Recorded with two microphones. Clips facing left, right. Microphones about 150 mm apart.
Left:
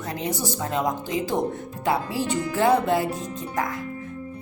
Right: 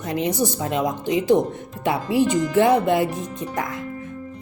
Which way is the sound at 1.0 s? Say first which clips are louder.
Right 6 dB; 20° right (ahead or behind).